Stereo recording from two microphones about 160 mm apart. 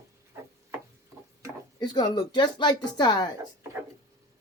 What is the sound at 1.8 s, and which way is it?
Speech, 25° left (ahead or behind).